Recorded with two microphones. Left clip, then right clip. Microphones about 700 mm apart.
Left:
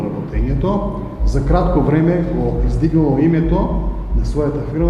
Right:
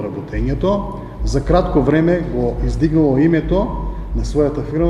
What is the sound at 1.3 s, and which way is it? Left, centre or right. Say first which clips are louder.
A man's voice: right 2 dB; right.